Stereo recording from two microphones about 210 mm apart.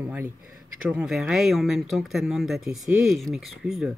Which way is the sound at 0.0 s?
10° right (ahead or behind).